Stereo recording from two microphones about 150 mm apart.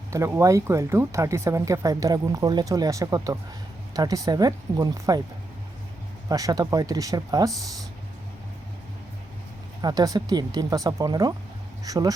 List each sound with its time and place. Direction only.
0.1 s speech: 20° right (ahead or behind)
6.2 s speech: 25° right (ahead or behind)
9.8 s speech: 25° right (ahead or behind)